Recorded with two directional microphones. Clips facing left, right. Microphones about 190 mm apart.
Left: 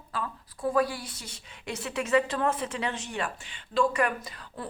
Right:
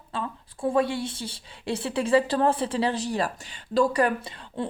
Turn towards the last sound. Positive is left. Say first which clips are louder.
# right 7 dB
turn(degrees=-25)  # may be behind; listen again after turning